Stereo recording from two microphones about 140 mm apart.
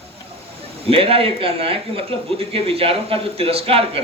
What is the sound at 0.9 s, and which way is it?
Speech, 40° right (ahead or behind).